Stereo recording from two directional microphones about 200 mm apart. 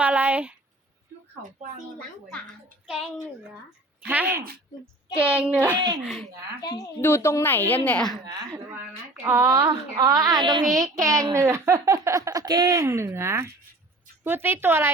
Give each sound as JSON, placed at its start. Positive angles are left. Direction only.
{"t": 0.0, "sound": "speech", "side_deg": -5}
{"t": 2.8, "sound": "a woman's voice", "side_deg": 0}
{"t": 6.6, "sound": "a woman's voice", "side_deg": 20}
{"t": 8.5, "sound": "a woman's voice", "side_deg": -10}